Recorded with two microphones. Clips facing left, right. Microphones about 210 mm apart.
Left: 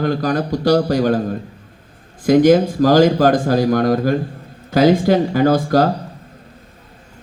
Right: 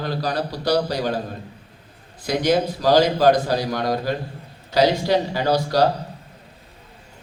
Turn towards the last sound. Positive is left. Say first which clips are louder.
# left 5 dB
turn(degrees=50)  # may be behind; listen again after turning